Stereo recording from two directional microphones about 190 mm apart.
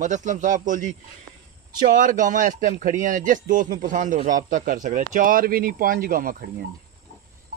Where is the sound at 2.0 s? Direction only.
45° right (ahead or behind).